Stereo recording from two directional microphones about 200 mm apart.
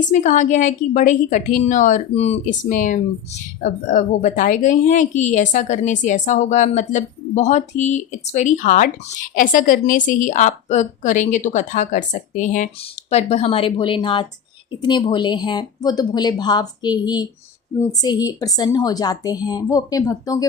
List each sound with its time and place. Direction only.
0.0 s a woman's voice: 40° left (ahead or behind); by 20.4 s 15° left (ahead or behind)